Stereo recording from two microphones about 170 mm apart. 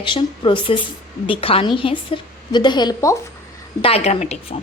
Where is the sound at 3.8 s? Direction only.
35° left (ahead or behind).